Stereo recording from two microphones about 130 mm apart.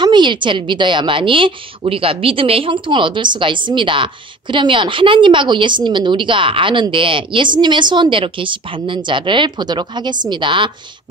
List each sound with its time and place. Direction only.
0.0 s a woman's voice: 35° right (ahead or behind)